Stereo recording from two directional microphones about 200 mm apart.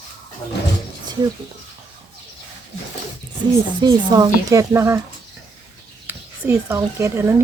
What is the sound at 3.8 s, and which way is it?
Speech, 20° right (ahead or behind).